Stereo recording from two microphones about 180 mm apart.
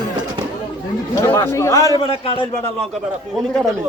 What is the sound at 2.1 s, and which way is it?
Speech, 35° left (ahead or behind).